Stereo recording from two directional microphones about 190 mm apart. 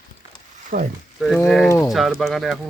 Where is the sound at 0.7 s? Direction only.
50° right (ahead or behind).